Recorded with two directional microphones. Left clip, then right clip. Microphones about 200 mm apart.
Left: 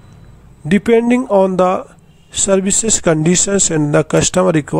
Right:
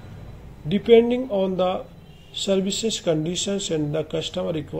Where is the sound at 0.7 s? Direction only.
45° left (ahead or behind).